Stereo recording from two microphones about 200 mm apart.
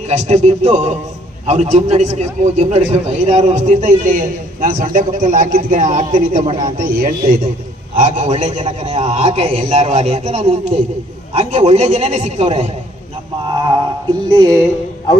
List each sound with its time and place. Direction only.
0.1 s a man's voice: 35° right (ahead or behind)
6.4 s a man's voice: 25° right (ahead or behind)
6.7 s a man's voice: 45° right (ahead or behind)
13.4 s a sound: 20° right (ahead or behind)
14.3 s a man's voice: 20° right (ahead or behind)